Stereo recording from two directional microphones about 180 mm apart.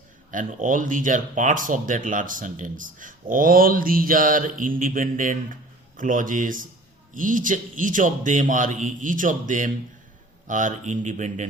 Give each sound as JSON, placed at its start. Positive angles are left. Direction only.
{"t": 0.3, "sound": "speech", "side_deg": -45}